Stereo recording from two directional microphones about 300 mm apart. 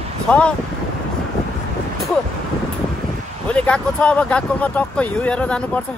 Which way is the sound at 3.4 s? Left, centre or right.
Centre.